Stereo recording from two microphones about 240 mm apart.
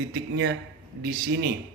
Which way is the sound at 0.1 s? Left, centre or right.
Right.